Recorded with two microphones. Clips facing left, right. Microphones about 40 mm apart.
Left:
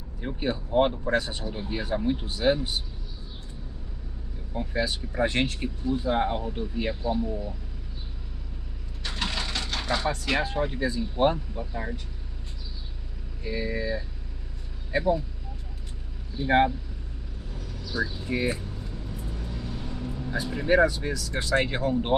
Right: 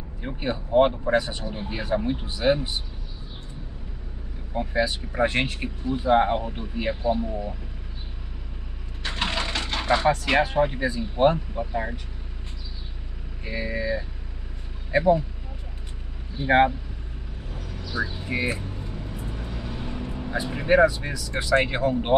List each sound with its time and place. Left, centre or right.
0.2 s speech: centre
4.6 s speech: right
9.0 s a sound: right
11.3 s speech: right
13.4 s speech: right
16.3 s speech: right
17.5 s vehicle: right
20.6 s speech: centre